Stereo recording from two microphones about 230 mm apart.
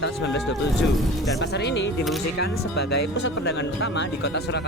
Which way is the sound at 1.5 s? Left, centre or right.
Left.